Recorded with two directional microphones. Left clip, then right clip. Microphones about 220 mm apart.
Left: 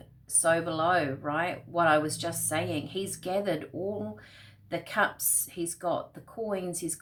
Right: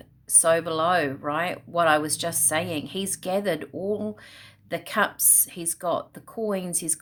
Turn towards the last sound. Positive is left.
turn(degrees=-50)  # may be behind; listen again after turning